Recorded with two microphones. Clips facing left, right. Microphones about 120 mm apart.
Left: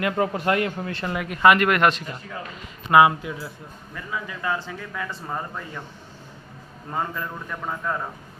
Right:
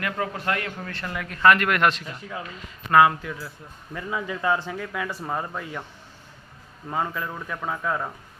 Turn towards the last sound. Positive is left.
turn(degrees=-5)  # may be behind; listen again after turning